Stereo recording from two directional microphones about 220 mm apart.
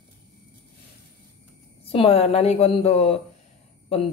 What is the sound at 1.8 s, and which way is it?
A woman's voice, 25° left (ahead or behind).